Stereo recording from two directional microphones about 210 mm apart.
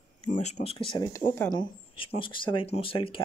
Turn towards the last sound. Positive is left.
turn(degrees=25)  # may be behind; listen again after turning